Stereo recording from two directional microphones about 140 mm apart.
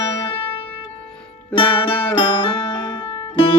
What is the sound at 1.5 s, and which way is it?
Music, 40° left (ahead or behind).